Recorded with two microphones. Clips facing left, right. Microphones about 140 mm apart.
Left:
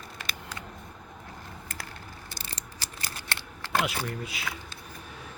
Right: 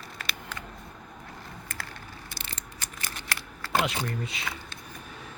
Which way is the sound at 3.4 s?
Centre (ahead or behind).